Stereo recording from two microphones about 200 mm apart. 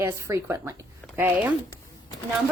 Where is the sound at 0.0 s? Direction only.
15° right (ahead or behind).